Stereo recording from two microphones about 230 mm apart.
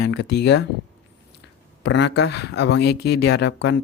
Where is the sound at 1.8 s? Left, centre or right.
Left.